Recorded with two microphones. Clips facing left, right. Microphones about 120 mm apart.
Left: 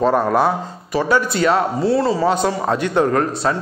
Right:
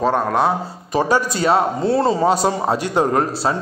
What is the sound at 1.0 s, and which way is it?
A man's voice, 35° right (ahead or behind).